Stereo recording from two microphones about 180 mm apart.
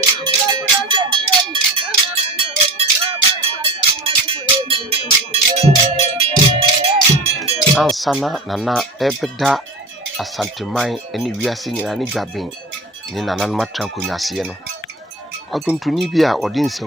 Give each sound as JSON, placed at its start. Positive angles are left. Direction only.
{"t": 0.5, "sound": "a sound", "side_deg": -25}
{"t": 7.8, "sound": "speech", "side_deg": 0}
{"t": 15.5, "sound": "speech", "side_deg": 0}